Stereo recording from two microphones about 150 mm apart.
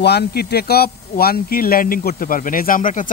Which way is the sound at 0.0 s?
90° left.